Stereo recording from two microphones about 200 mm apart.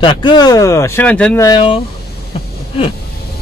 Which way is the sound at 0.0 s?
25° left (ahead or behind).